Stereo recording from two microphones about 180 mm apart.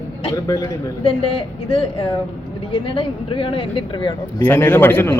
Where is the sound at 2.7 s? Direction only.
30° left (ahead or behind).